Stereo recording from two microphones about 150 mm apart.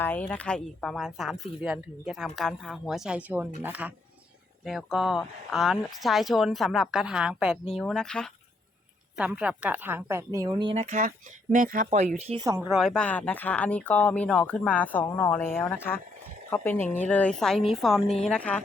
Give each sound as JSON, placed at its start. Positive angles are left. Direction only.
{"t": 0.0, "sound": "speech", "side_deg": 10}
{"t": 9.1, "sound": "speech", "side_deg": -5}
{"t": 10.8, "sound": "speech", "side_deg": -55}
{"t": 11.5, "sound": "speech", "side_deg": -65}
{"t": 12.6, "sound": "speech", "side_deg": 0}